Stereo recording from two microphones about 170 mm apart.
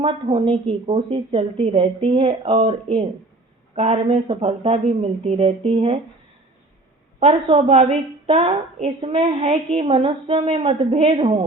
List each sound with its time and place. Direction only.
0.0 s a woman's voice: 30° right (ahead or behind)
7.2 s a woman's voice: 35° right (ahead or behind)